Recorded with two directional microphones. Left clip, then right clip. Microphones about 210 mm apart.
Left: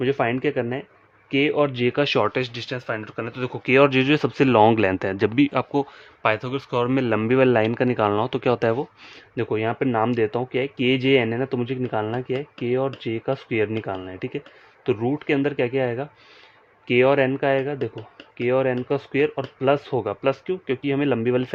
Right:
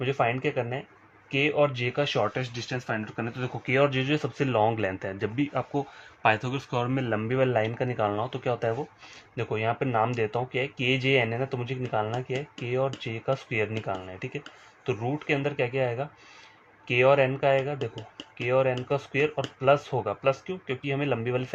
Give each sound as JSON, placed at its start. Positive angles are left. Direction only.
{"t": 0.0, "sound": "speech", "side_deg": 50}
{"t": 3.8, "sound": "speech", "side_deg": 55}
{"t": 6.2, "sound": "speech", "side_deg": 25}